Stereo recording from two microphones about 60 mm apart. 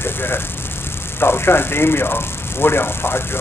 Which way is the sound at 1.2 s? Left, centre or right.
Left.